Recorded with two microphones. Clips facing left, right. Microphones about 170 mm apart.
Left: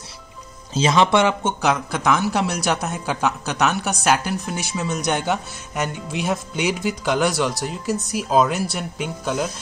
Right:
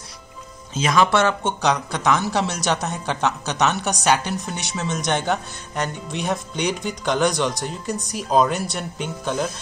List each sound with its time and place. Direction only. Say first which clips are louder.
0.7 s speech: left 1 dB; 25° left (ahead or behind)
1.6 s speech: even; 5° left (ahead or behind)